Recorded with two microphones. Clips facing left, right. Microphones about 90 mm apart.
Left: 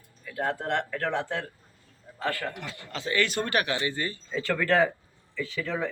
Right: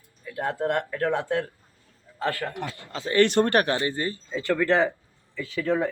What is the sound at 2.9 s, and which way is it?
Speech, 40° right (ahead or behind).